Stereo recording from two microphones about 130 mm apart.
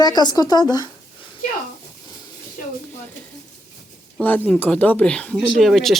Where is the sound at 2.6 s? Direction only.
90° left.